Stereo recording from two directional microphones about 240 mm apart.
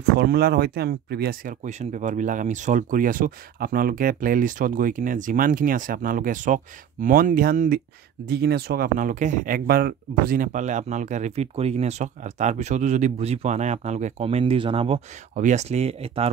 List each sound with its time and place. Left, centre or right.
0.2 s speech: right